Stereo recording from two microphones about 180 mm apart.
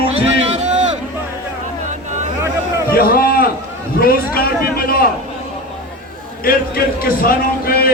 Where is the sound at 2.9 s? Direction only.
55° left (ahead or behind).